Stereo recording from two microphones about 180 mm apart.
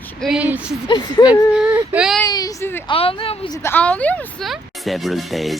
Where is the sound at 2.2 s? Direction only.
20° left (ahead or behind).